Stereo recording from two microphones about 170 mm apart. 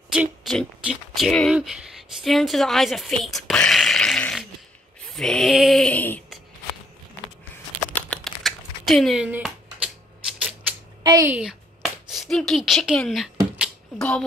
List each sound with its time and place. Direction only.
0.1 s speech: centre (ahead or behind)
5.1 s music: 5° left (ahead or behind)
7.9 s typing: 5° left (ahead or behind)
11.1 s a woman's voice: 20° right (ahead or behind)
11.3 s speech: 5° right (ahead or behind)
13.6 s a sound: 5° left (ahead or behind)